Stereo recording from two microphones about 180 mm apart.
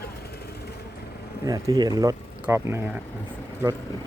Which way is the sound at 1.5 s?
20° right (ahead or behind).